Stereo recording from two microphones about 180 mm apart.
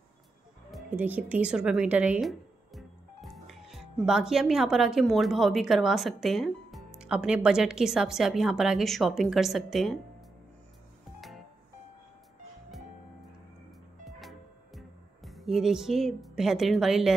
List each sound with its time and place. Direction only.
0.9 s speech: 10° right (ahead or behind)
11.1 s music: centre (ahead or behind)
14.0 s music: centre (ahead or behind)